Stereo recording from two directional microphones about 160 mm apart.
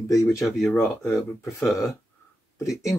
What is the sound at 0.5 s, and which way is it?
Speech, centre (ahead or behind).